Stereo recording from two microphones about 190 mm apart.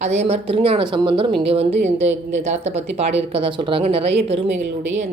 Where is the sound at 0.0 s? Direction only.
35° right (ahead or behind).